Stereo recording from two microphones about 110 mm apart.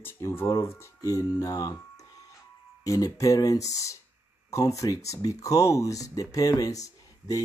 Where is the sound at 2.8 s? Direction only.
35° left (ahead or behind).